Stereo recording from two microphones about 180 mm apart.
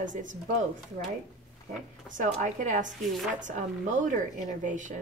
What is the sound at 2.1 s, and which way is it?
Speech, 45° right (ahead or behind).